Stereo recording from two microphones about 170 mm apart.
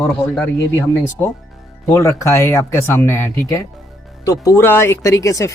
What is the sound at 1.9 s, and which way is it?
Speech, 15° left (ahead or behind).